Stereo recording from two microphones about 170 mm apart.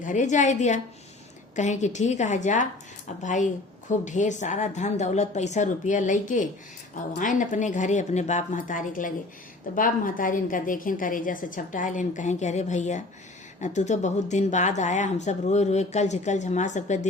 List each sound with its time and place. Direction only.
0.0 s speech: 45° left (ahead or behind)